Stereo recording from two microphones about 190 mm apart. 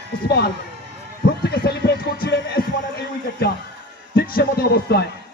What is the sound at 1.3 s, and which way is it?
Music, 55° left (ahead or behind).